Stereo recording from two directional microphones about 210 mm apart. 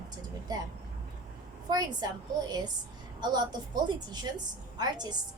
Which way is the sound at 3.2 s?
20° right (ahead or behind).